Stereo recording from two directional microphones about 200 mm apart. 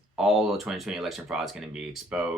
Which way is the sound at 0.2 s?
Centre (ahead or behind).